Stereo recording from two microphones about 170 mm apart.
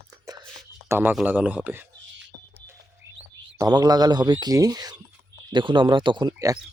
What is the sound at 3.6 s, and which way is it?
Speech, 25° right (ahead or behind).